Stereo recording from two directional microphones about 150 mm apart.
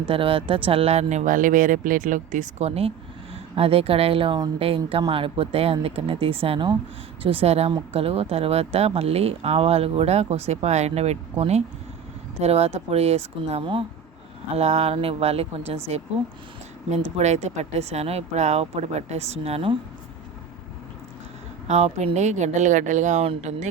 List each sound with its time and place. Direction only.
0.0 s a woman's voice: 35° right (ahead or behind)
16.9 s speech: 50° right (ahead or behind)
21.7 s speech: 45° right (ahead or behind)
23.2 s speech: 45° right (ahead or behind)